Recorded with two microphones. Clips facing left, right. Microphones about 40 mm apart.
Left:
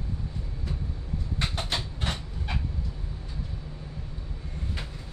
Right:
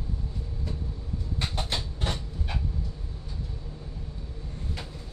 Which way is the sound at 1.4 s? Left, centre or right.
Centre.